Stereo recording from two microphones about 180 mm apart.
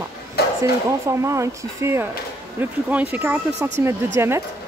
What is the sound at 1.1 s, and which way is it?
Speech, 15° right (ahead or behind).